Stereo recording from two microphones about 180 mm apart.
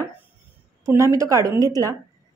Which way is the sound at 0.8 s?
15° right (ahead or behind).